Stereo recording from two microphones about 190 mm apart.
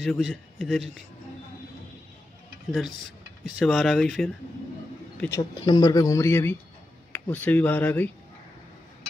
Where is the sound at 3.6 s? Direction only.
Centre (ahead or behind).